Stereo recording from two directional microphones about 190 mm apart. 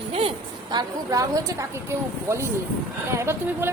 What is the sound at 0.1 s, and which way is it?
A woman's voice, 30° right (ahead or behind).